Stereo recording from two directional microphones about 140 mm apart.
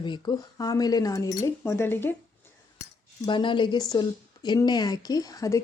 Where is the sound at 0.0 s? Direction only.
30° left (ahead or behind); by 2.1 s 15° left (ahead or behind).